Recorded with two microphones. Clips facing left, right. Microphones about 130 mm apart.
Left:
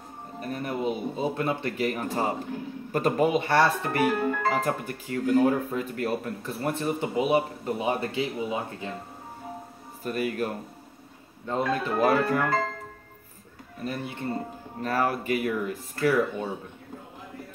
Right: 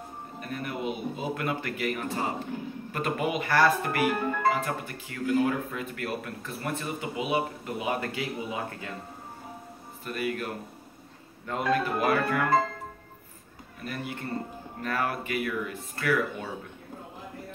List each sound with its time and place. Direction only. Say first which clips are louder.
0.4 s speech: left 4 dB; 35° left (ahead or behind)
4.5 s speech: left 1 dB; 40° left (ahead or behind); by 8.9 s 25° left (ahead or behind)
10.0 s speech: left 3 dB; 40° left (ahead or behind)
11.4 s speech: even; 30° left (ahead or behind)
13.8 s speech: left 3 dB; 25° left (ahead or behind)